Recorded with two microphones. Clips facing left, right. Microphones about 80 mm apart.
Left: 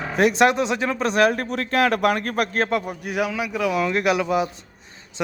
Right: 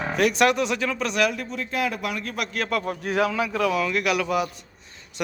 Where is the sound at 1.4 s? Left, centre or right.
Left.